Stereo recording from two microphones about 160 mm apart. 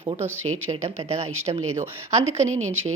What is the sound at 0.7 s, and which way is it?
A woman's voice, 40° right (ahead or behind).